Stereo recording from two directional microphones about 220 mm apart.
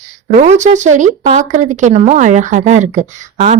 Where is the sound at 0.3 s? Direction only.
35° right (ahead or behind).